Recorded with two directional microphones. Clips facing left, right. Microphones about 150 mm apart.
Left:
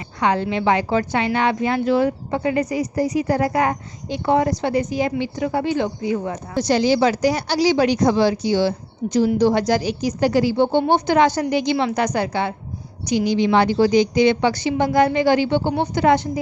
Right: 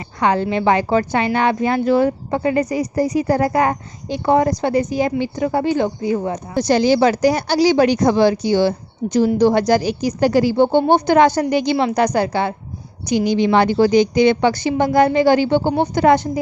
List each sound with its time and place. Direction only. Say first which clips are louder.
0.2 s a woman's voice: right 3 dB; 40° right (ahead or behind)
13.1 s a woman's voice: right 2 dB; 50° right (ahead or behind)